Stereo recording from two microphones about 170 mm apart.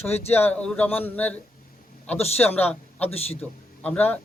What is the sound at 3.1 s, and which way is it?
Speech, 35° left (ahead or behind).